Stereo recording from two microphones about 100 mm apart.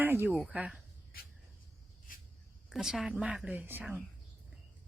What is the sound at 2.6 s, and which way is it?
A woman's voice, 5° right (ahead or behind).